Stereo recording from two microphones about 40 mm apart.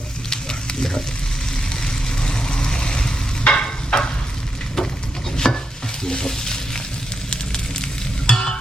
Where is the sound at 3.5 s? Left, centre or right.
Centre.